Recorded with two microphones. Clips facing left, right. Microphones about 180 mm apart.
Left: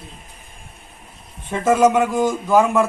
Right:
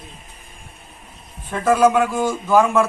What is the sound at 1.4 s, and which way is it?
Speech, 20° left (ahead or behind).